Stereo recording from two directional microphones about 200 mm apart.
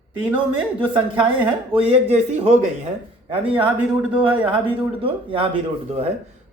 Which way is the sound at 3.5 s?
5° right (ahead or behind).